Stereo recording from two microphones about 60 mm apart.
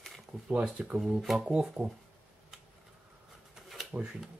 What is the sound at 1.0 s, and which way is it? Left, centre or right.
Speech, centre.